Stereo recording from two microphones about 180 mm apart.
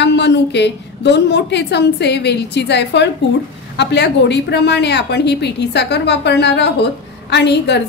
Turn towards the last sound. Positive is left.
turn(degrees=70)  # may be behind; listen again after turning